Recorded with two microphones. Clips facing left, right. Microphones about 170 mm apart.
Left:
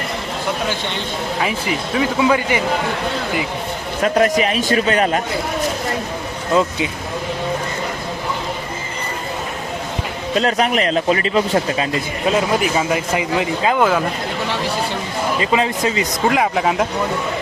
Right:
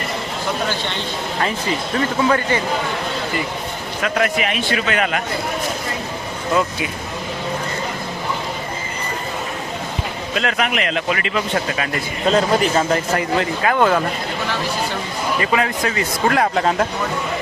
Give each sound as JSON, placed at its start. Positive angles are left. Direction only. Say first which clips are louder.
{"t": 1.4, "sound": "speech", "louder": "right 1 dB", "side_deg": 5}
{"t": 4.0, "sound": "a man's voice", "louder": "left 5 dB", "side_deg": 35}
{"t": 10.3, "sound": "a man's voice", "louder": "left 4 dB", "side_deg": 35}
{"t": 12.2, "sound": "speech", "louder": "right 2 dB", "side_deg": 10}
{"t": 13.7, "sound": "speech", "louder": "right 1 dB", "side_deg": 5}
{"t": 15.4, "sound": "speech", "louder": "left 1 dB", "side_deg": 20}
{"t": 16.6, "sound": "speech", "louder": "even", "side_deg": 5}